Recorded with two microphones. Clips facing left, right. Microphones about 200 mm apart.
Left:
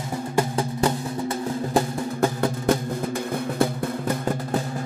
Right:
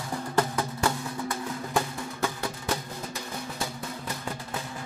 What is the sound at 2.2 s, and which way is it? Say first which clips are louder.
Music: left 9 dB; 55° left (ahead or behind).